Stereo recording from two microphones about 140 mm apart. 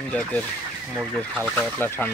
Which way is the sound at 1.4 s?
15° left (ahead or behind).